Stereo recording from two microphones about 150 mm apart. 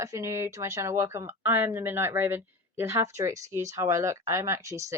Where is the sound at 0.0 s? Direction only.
20° right (ahead or behind).